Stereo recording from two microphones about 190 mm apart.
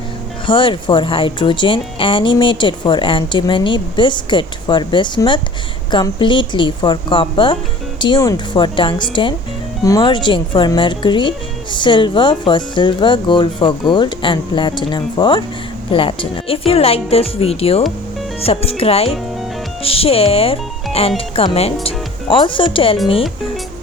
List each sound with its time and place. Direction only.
0.4 s speech: 25° left (ahead or behind)